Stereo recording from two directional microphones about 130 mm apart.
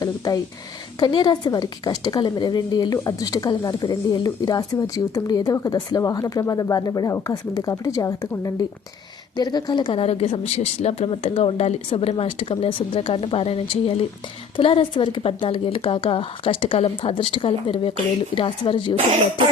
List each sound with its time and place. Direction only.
0.9 s a woman's voice: 35° left (ahead or behind)